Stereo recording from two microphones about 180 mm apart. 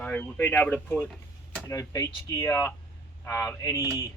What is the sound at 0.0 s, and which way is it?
Speech, 10° left (ahead or behind).